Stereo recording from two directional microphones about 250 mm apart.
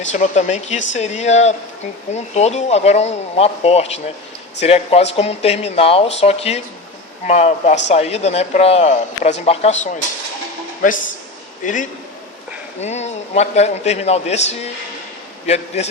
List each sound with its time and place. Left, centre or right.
0.1 s a man's voice: left